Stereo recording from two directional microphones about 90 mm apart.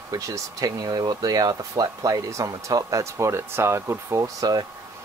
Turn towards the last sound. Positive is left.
turn(degrees=-40)  # may be behind; listen again after turning